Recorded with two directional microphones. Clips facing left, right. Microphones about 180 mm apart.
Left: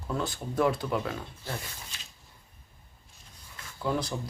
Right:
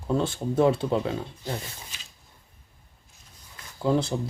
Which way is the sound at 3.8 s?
25° right (ahead or behind).